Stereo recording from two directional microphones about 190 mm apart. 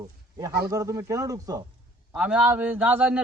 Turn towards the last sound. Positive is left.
turn(degrees=-10)  # may be behind; listen again after turning